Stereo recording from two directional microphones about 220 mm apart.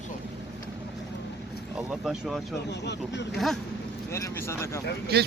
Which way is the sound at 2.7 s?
50° left (ahead or behind).